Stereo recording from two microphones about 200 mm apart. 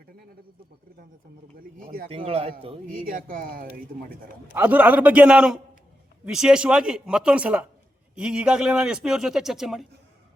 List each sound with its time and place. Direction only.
1.8 s a sound: 45° right (ahead or behind)
2.0 s a man's voice: 30° right (ahead or behind)
2.9 s speech: 45° right (ahead or behind)
4.5 s a man's voice: 5° right (ahead or behind)